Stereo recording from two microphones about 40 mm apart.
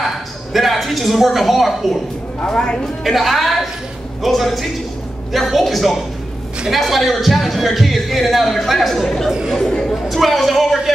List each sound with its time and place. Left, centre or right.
0.0 s speech: centre
2.4 s a woman's voice: left
3.0 s a man's voice: centre